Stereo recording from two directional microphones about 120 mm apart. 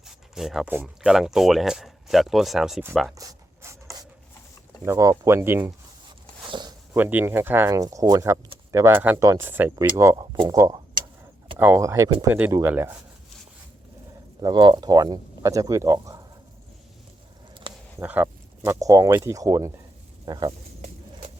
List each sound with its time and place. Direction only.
0.0 s a sound: centre (ahead or behind)
1.0 s speech: 5° right (ahead or behind)
3.2 s writing: 25° right (ahead or behind)
4.9 s speech: 25° right (ahead or behind)
6.5 s zipper: 35° right (ahead or behind)
6.9 s speech: 15° right (ahead or behind)
10.2 s speech: 40° right (ahead or behind)
11.5 s speech: 20° right (ahead or behind)
12.6 s speech: 15° right (ahead or behind)
14.4 s speech: 40° right (ahead or behind)
18.0 s speech: 15° right (ahead or behind)
18.6 s speech: 25° right (ahead or behind)